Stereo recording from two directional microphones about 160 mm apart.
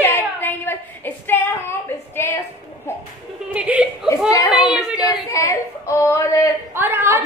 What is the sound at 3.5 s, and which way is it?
A woman's voice, 10° right (ahead or behind).